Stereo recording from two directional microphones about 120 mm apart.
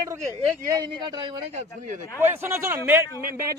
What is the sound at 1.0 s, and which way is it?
Speech, 40° right (ahead or behind).